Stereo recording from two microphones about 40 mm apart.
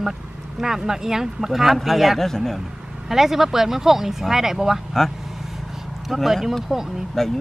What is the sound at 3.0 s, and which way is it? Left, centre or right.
Speech, centre.